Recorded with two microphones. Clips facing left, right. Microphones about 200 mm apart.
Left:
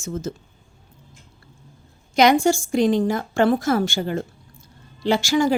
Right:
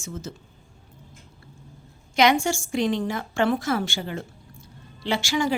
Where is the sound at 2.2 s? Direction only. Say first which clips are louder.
Left 4 dB; 40° left (ahead or behind).